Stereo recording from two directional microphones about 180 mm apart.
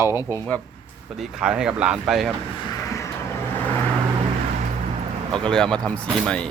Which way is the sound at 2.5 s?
25° left (ahead or behind).